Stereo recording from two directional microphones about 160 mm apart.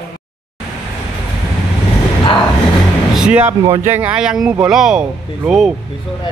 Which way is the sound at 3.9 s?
10° right (ahead or behind).